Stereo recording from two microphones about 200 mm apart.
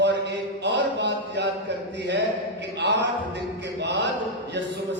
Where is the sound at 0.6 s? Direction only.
60° right (ahead or behind).